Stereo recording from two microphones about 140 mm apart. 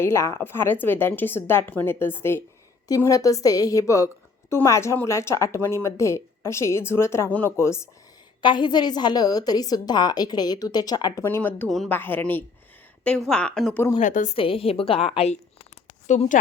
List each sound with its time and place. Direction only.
0.0 s a woman's voice: 20° left (ahead or behind)
8.4 s a woman's voice: 35° left (ahead or behind)
11.2 s a woman's voice: 15° left (ahead or behind)
14.0 s a woman's voice: 60° left (ahead or behind)
14.3 s a woman's voice: 40° left (ahead or behind)
16.0 s a woman's voice: 60° left (ahead or behind)